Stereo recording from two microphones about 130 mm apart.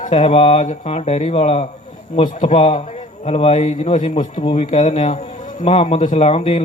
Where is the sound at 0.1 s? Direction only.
50° left (ahead or behind).